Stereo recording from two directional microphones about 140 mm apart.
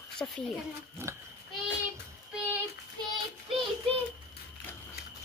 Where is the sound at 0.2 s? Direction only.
10° left (ahead or behind).